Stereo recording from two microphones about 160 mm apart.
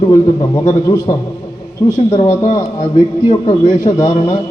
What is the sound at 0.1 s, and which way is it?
A man's voice, 20° left (ahead or behind).